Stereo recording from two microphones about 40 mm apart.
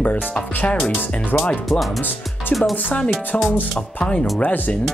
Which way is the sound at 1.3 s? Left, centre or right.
Left.